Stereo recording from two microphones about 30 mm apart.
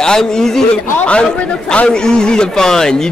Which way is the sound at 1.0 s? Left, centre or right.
Left.